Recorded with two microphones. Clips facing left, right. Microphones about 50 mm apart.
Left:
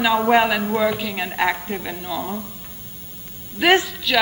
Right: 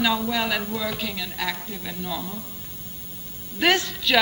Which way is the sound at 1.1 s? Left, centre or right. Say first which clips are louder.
Left 8 dB; left.